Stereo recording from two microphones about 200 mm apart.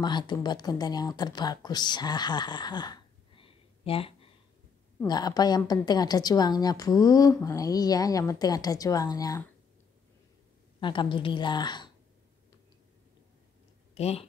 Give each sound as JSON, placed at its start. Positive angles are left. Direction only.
{"t": 0.0, "sound": "a woman's voice", "side_deg": 20}
{"t": 10.8, "sound": "a woman's voice", "side_deg": 25}
{"t": 13.9, "sound": "speech", "side_deg": 30}